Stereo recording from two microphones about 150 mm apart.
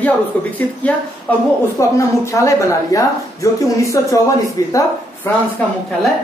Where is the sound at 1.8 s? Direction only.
20° left (ahead or behind).